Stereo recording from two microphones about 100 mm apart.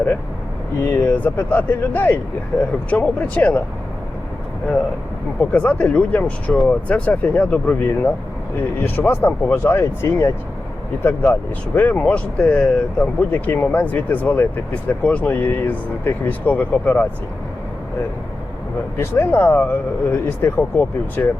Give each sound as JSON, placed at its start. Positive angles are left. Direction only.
{"t": 0.9, "sound": "speech", "side_deg": 20}
{"t": 5.4, "sound": "speech", "side_deg": 10}
{"t": 18.9, "sound": "speech", "side_deg": 20}